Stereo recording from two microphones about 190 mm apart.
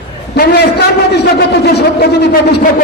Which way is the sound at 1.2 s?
60° left (ahead or behind).